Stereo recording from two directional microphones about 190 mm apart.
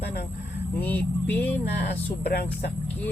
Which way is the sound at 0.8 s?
10° left (ahead or behind).